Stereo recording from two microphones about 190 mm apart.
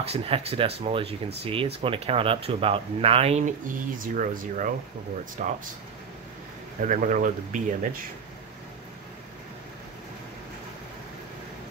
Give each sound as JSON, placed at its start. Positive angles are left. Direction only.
{"t": 0.0, "sound": "speech", "side_deg": -30}
{"t": 6.8, "sound": "speech", "side_deg": -40}